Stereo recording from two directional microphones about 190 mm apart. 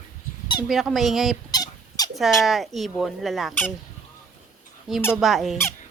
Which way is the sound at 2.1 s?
Centre (ahead or behind).